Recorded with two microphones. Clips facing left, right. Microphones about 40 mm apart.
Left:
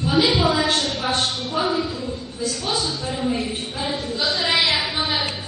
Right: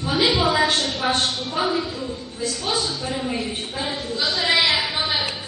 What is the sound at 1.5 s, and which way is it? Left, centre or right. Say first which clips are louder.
Speech: left 1 dB; centre.